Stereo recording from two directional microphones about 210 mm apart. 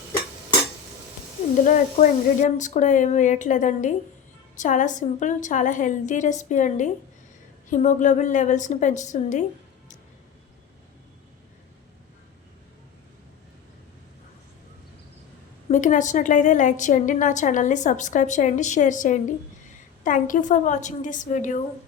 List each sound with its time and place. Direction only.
1.6 s a woman's voice: 35° left (ahead or behind)
15.7 s a woman's voice: 35° left (ahead or behind)